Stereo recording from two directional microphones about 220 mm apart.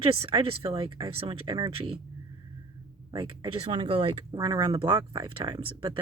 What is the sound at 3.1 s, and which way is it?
Speech, 20° right (ahead or behind).